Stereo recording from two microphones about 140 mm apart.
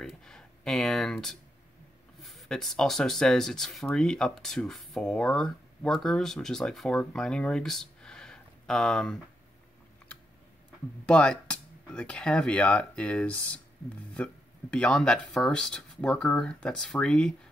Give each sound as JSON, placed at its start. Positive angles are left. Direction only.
{"t": 0.0, "sound": "speech", "side_deg": 5}
{"t": 11.1, "sound": "speech", "side_deg": 5}